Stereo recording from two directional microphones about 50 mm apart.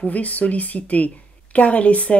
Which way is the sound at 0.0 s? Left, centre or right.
Left.